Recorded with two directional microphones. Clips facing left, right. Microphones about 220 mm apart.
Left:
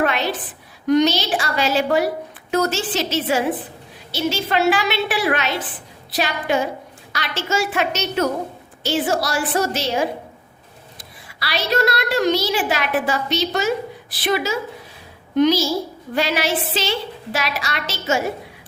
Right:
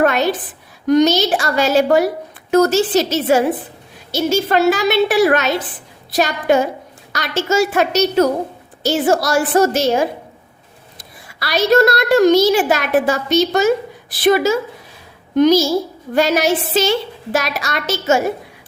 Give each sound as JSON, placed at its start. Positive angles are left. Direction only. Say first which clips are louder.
{"t": 0.0, "sound": "a sound", "louder": "right 5 dB", "side_deg": -45}
{"t": 0.9, "sound": "a woman's voice", "louder": "right 4 dB", "side_deg": -45}
{"t": 11.3, "sound": "a woman's voice", "louder": "right 8 dB", "side_deg": -45}